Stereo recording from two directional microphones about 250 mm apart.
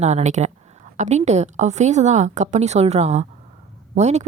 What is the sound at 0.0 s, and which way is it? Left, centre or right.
A woman's voice, right.